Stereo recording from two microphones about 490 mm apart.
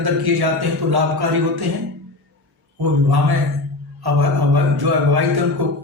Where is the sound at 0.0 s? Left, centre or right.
Right.